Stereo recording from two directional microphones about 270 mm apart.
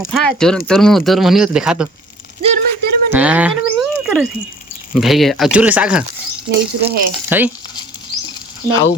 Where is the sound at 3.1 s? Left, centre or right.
Centre.